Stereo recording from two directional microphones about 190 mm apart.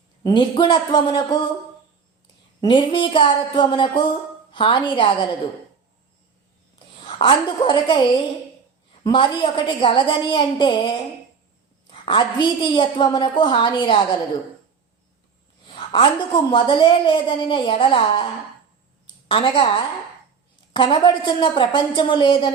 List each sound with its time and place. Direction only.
0.2 s a woman's voice: 20° left (ahead or behind)
2.6 s a woman's voice: 25° left (ahead or behind)
7.0 s a woman's voice: 25° left (ahead or behind)
9.0 s a woman's voice: 25° left (ahead or behind)
15.6 s a woman's voice: 30° left (ahead or behind)
19.3 s a woman's voice: 25° left (ahead or behind)
20.8 s a woman's voice: 25° left (ahead or behind)